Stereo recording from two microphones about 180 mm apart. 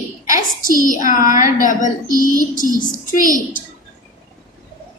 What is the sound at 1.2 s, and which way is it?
Speech, 20° right (ahead or behind).